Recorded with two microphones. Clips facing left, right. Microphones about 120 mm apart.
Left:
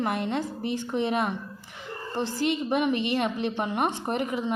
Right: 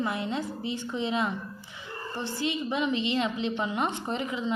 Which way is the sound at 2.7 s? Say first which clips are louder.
Left 3 dB; 55° left (ahead or behind).